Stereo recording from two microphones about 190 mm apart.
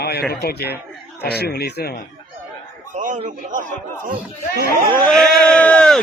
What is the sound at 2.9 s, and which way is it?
Speech, 45° right (ahead or behind).